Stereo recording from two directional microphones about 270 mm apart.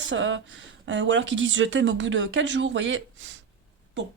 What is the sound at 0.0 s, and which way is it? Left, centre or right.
A woman's voice, right.